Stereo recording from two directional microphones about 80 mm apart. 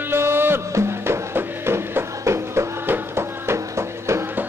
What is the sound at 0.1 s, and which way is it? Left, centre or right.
Music, right.